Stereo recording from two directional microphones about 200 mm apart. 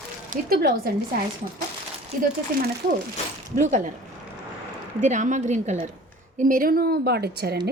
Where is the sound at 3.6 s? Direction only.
40° right (ahead or behind).